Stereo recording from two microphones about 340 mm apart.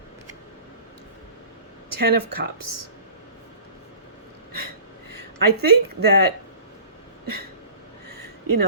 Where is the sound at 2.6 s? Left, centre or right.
Right.